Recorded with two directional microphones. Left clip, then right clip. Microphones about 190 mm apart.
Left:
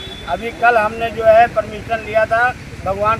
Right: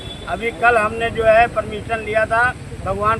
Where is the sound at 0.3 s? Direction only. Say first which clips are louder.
Left 1 dB; centre (ahead or behind).